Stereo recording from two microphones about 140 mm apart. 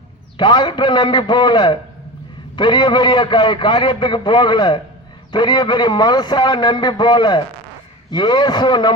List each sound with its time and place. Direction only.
0.3 s a man's voice: 35° left (ahead or behind)